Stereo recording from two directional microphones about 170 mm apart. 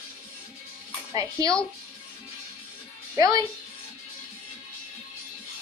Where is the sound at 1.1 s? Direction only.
20° right (ahead or behind).